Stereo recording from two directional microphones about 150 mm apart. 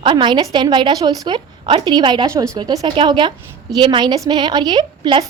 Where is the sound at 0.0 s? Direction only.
30° right (ahead or behind).